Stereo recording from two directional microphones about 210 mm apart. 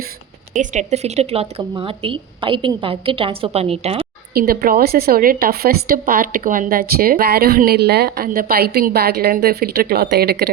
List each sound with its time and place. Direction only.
0.5 s a woman's voice: 35° right (ahead or behind)
4.4 s a woman's voice: 45° right (ahead or behind)